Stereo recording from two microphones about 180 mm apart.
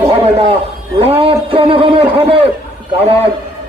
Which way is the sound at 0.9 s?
35° right (ahead or behind).